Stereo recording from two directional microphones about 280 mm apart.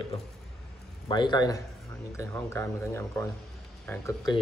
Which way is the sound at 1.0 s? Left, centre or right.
Centre.